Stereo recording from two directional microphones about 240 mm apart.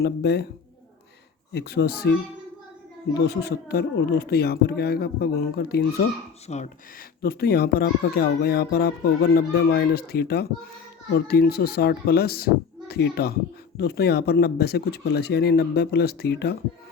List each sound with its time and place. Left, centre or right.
0.0 s speech: left
1.5 s speech: left
3.2 s speech: left
6.5 s speech: left
7.2 s speech: left